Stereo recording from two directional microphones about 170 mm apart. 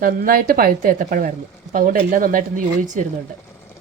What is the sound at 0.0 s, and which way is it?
A woman's voice, 55° right (ahead or behind).